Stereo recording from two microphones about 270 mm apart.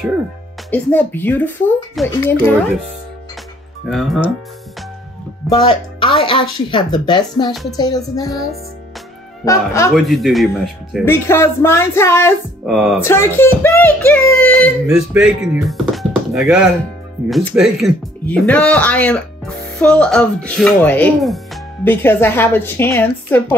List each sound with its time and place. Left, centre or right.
0.7 s music: centre
3.9 s speech: centre
5.5 s speech: centre
6.7 s music: centre
9.9 s speech: centre
11.1 s music: centre
13.0 s speech: centre
21.8 s music: centre